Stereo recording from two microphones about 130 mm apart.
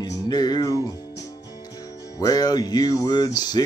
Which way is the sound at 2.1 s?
30° left (ahead or behind).